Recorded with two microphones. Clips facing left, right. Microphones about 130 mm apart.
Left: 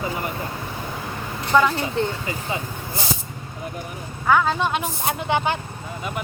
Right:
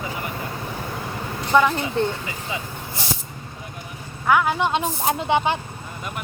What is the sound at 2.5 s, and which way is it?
Speech, 40° left (ahead or behind).